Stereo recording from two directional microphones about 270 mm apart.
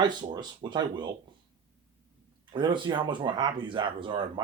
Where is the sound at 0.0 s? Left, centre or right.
Centre.